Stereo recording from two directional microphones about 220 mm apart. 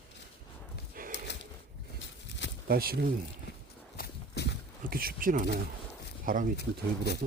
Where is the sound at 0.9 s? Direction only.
40° right (ahead or behind).